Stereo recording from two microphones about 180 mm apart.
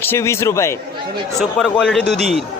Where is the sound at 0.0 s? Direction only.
15° left (ahead or behind).